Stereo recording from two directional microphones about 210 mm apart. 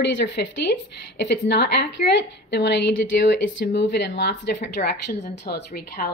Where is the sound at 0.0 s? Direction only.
55° left (ahead or behind).